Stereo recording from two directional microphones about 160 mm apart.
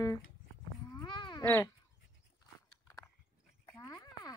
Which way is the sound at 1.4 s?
15° left (ahead or behind).